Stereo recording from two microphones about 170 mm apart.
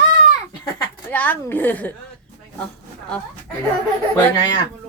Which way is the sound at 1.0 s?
10° left (ahead or behind).